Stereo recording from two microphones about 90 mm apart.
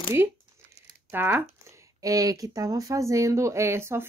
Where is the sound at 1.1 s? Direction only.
25° right (ahead or behind).